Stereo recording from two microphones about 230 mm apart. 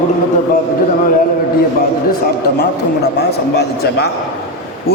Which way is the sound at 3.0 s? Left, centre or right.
Left.